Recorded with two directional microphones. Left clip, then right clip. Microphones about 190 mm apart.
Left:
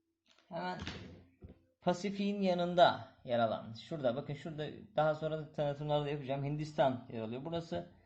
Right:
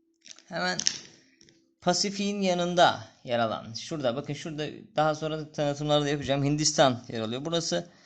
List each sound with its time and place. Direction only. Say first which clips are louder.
0.5 s speech: right 10 dB; 50° right (ahead or behind)
1.8 s speech: right 8 dB; 25° right (ahead or behind)